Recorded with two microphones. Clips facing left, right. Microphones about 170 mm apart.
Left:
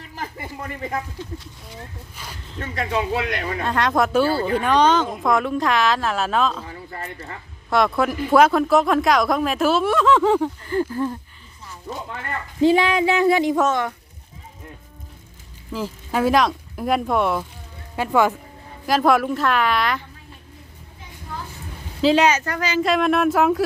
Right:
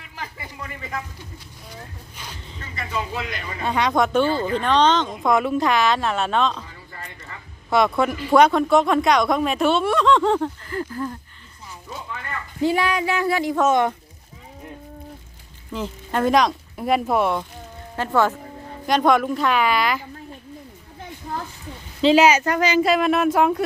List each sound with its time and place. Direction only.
0.2 s a sound: 45° left (ahead or behind)
2.1 s speech: 5° left (ahead or behind)
2.6 s a man's voice: 65° left (ahead or behind)
3.6 s speech: centre (ahead or behind)
6.9 s speech: 55° left (ahead or behind)
7.7 s speech: centre (ahead or behind)
10.7 s speech: 25° left (ahead or behind)
12.6 s speech: 25° left (ahead or behind)
13.7 s speech: 20° right (ahead or behind)
15.7 s speech: 5° left (ahead or behind)
17.9 s speech: 10° left (ahead or behind)
22.0 s speech: 5° right (ahead or behind)
22.8 s speech: centre (ahead or behind)